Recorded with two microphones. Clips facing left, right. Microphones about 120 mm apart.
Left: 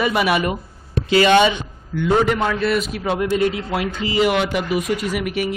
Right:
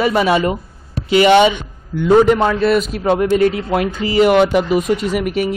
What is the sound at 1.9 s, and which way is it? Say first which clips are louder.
Speech: right 6 dB; 40° right (ahead or behind).